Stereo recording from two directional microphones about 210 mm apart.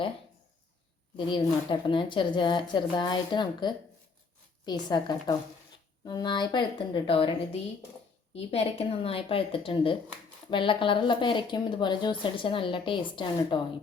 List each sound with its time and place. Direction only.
1.1 s a woman's voice: 25° left (ahead or behind)